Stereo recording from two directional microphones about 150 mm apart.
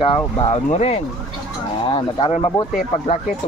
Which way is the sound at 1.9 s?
35° left (ahead or behind).